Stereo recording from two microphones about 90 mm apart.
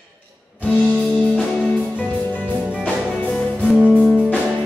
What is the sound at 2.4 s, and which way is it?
Music, 15° right (ahead or behind).